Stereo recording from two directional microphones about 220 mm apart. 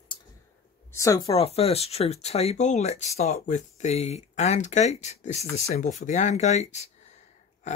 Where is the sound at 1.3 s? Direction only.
25° left (ahead or behind).